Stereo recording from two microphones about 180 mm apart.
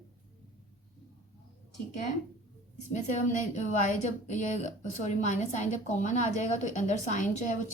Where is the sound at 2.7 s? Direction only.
40° left (ahead or behind).